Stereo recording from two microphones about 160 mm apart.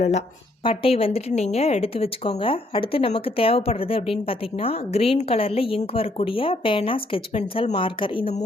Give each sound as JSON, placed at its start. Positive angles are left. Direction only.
{"t": 0.6, "sound": "a woman's voice", "side_deg": 35}